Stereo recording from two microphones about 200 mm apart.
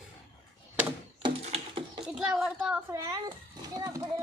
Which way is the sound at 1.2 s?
25° right (ahead or behind).